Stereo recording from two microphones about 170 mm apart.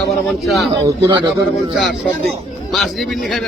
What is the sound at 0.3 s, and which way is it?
Speech, centre (ahead or behind).